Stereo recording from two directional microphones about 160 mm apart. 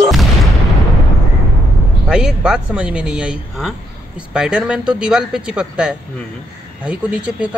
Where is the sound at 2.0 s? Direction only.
5° right (ahead or behind).